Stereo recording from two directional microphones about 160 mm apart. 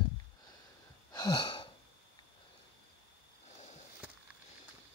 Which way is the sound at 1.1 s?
25° left (ahead or behind).